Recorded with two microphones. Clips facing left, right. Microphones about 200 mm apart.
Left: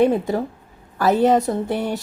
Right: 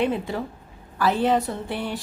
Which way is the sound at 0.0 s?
45° left (ahead or behind).